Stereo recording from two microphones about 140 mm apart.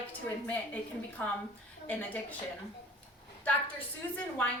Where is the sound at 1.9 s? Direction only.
10° left (ahead or behind).